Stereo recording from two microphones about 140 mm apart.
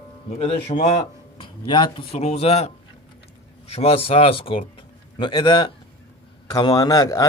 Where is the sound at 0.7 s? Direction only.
45° left (ahead or behind).